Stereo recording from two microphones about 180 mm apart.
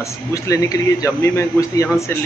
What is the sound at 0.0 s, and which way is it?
A man's voice, 15° left (ahead or behind).